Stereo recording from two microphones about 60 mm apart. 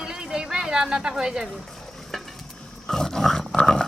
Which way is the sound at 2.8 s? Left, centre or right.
Centre.